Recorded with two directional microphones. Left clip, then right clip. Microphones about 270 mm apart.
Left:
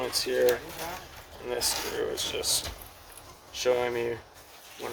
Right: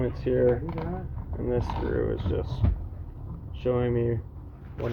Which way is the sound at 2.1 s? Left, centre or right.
Left.